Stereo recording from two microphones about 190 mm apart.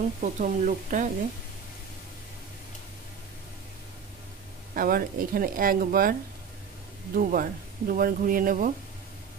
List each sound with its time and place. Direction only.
0.2 s speech: 45° right (ahead or behind)
4.7 s speech: 50° right (ahead or behind)
7.2 s speech: 50° right (ahead or behind)